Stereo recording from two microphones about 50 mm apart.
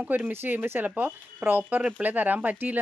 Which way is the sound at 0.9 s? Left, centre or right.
Right.